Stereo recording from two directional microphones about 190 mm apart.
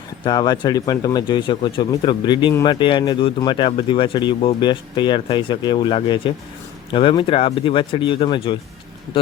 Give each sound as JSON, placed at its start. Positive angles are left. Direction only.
{"t": 0.3, "sound": "speech", "side_deg": 20}